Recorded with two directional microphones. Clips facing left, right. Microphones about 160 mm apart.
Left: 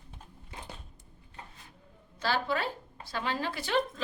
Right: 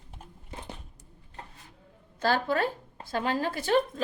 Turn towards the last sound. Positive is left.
turn(degrees=-45)  # may be behind; listen again after turning